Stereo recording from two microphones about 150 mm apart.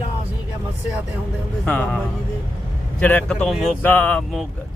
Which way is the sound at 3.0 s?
10° left (ahead or behind).